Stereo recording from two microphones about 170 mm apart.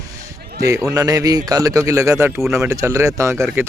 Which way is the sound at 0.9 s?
20° right (ahead or behind).